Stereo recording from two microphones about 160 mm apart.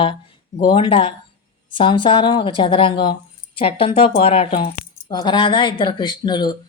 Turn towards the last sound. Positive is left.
turn(degrees=25)  # may be behind; listen again after turning